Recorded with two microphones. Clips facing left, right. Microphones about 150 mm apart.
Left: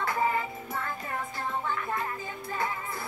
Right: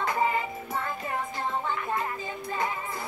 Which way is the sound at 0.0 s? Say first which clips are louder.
Right 1 dB; 20° right (ahead or behind).